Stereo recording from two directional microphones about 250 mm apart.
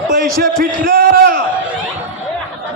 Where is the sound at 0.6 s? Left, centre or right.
Right.